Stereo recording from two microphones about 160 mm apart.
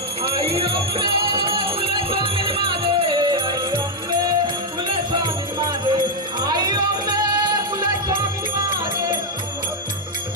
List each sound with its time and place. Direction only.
0.2 s music: 35° right (ahead or behind)